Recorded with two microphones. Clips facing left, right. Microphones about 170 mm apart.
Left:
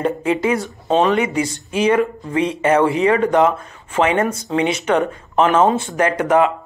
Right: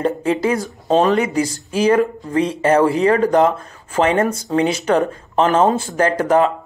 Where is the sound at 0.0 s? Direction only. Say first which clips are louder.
Even; 35° right (ahead or behind).